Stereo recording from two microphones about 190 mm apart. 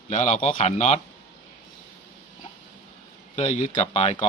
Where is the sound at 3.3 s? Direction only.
35° left (ahead or behind).